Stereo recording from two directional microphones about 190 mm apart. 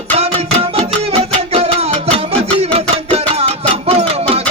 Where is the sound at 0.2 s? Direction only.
30° right (ahead or behind).